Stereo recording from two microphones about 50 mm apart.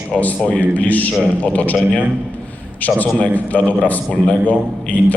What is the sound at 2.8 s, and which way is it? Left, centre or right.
A man's voice, left.